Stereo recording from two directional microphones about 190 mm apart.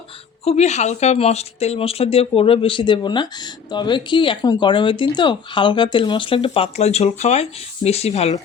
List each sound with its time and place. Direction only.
0.4 s speech: 35° left (ahead or behind)